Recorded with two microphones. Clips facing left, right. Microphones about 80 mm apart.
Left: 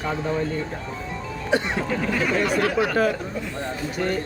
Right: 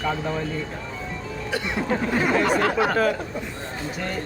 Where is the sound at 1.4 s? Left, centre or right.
Left.